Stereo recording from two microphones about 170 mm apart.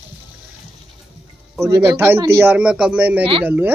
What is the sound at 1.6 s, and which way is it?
Speech, 20° right (ahead or behind).